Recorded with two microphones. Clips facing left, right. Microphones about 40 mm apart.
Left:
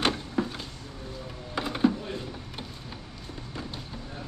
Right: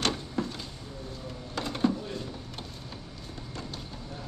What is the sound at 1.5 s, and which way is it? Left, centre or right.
Typing, centre.